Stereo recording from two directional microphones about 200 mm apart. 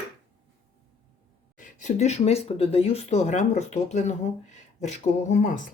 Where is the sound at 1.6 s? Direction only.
40° left (ahead or behind).